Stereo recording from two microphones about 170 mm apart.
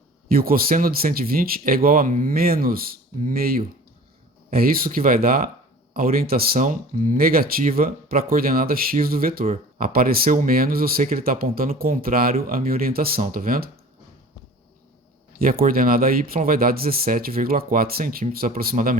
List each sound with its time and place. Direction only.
0.3 s speech: 60° right (ahead or behind)
15.4 s speech: 55° right (ahead or behind)